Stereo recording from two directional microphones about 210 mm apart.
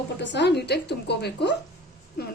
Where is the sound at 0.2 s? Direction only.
55° left (ahead or behind).